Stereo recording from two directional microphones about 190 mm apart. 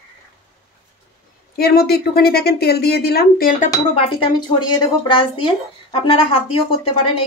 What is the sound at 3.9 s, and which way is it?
Speech, 30° left (ahead or behind).